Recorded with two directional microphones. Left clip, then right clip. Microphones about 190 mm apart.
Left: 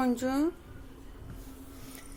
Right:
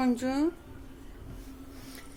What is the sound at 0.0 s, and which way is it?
Speech, centre (ahead or behind).